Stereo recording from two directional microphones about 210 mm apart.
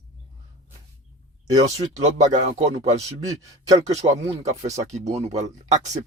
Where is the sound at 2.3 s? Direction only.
35° right (ahead or behind).